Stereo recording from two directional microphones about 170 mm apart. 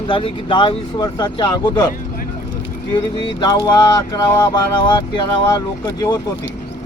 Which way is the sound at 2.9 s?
25° left (ahead or behind).